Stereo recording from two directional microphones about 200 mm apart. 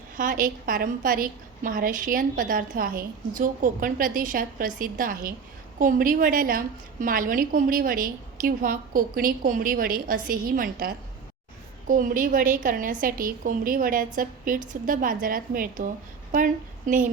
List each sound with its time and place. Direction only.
0.2 s a woman's voice: 45° right (ahead or behind)